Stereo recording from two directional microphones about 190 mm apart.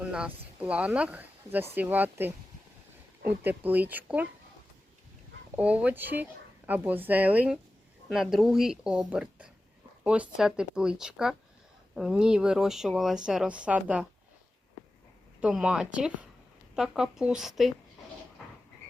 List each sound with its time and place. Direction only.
0.0 s speech: 5° right (ahead or behind)
5.5 s speech: 10° right (ahead or behind)
15.4 s speech: 5° right (ahead or behind)